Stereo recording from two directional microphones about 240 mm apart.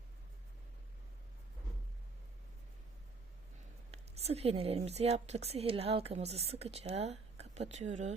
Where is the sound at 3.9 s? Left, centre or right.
Right.